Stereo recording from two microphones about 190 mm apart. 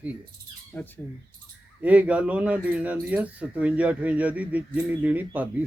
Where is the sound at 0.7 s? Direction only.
10° left (ahead or behind).